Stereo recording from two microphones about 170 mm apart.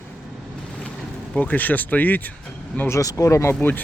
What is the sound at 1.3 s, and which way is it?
Speech, 10° left (ahead or behind).